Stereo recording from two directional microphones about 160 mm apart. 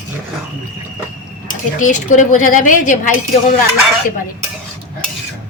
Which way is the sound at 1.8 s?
50° left (ahead or behind).